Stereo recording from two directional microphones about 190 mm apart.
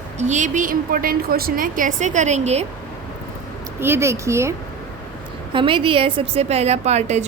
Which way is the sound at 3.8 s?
15° right (ahead or behind).